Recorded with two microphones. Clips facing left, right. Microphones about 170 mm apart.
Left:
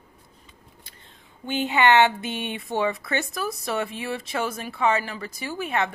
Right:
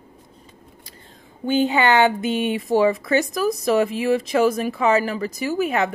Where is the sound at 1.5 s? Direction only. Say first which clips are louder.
Right 2 dB; 40° right (ahead or behind).